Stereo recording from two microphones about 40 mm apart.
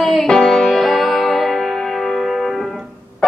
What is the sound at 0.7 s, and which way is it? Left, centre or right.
Music, centre.